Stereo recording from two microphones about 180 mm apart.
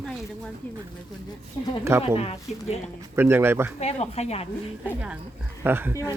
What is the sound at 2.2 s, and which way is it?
Speech, 35° left (ahead or behind).